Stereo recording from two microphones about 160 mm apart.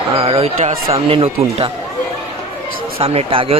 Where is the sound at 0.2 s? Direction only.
40° right (ahead or behind).